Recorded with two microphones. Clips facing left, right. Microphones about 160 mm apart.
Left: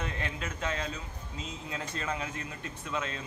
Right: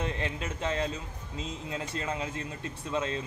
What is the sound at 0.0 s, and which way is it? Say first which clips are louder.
Speech: right 3 dB; 25° right (ahead or behind).